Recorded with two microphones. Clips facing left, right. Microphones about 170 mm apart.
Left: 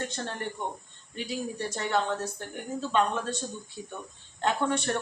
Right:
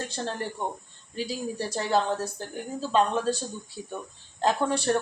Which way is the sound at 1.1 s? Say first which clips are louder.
Right 2 dB; 35° right (ahead or behind).